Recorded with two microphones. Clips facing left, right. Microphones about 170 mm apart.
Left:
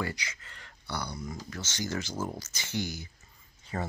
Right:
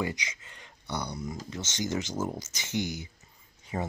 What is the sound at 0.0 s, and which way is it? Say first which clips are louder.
Speech: right 2 dB; 20° right (ahead or behind).